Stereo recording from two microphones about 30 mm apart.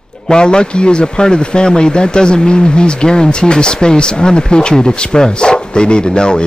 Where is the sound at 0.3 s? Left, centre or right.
Left.